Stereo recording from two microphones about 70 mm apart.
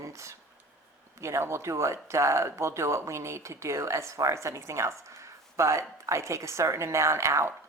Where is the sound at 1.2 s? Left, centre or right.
Right.